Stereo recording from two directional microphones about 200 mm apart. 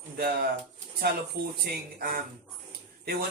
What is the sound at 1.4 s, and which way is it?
Speech, 50° right (ahead or behind).